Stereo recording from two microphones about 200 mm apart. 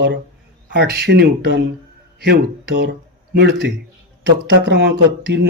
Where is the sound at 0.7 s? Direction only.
55° right (ahead or behind).